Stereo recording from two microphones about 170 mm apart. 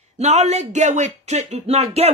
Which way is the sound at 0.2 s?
40° right (ahead or behind).